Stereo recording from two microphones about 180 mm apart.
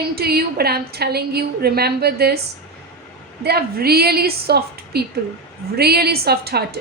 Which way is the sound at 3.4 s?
60° right (ahead or behind).